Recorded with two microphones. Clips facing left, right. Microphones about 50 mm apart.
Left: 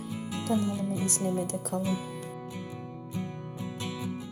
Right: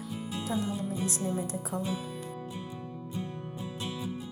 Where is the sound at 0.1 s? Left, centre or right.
Left.